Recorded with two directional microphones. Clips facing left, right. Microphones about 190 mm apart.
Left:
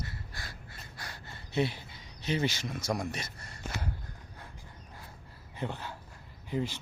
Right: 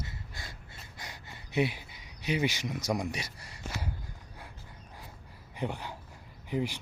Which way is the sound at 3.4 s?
50° left (ahead or behind).